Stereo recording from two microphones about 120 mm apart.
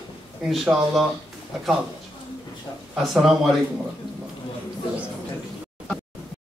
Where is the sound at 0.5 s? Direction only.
Centre (ahead or behind).